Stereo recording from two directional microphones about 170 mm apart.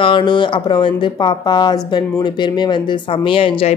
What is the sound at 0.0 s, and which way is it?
A woman's voice, 30° left (ahead or behind).